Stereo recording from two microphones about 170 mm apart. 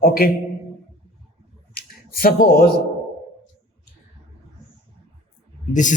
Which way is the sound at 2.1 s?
60° left (ahead or behind).